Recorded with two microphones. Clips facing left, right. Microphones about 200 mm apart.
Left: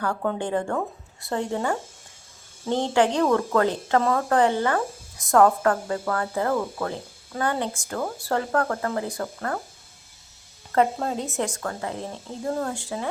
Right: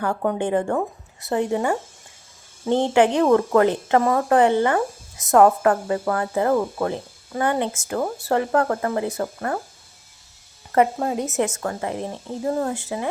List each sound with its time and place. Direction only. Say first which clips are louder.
0.0 s speech: right 4 dB; 20° right (ahead or behind)
10.8 s speech: right 3 dB; 15° right (ahead or behind)